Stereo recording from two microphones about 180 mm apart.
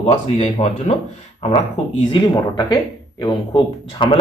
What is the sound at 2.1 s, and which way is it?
Speech, 25° left (ahead or behind).